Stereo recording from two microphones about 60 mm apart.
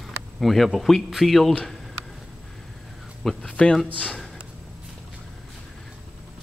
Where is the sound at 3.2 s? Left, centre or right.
Centre.